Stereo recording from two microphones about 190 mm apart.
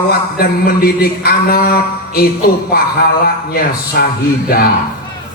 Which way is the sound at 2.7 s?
55° left (ahead or behind).